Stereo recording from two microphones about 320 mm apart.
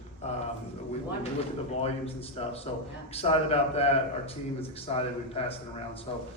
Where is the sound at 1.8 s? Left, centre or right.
Centre.